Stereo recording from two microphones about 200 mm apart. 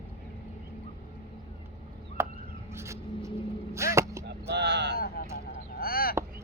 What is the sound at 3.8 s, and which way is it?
Arrow, 15° right (ahead or behind).